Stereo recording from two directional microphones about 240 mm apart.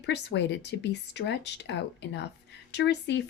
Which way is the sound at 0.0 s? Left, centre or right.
Left.